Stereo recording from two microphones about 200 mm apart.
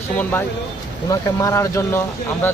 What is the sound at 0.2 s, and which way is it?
Speech, 10° left (ahead or behind).